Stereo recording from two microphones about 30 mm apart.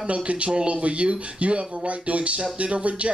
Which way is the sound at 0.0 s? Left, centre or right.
Right.